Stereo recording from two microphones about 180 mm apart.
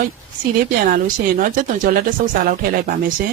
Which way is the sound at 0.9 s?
50° right (ahead or behind).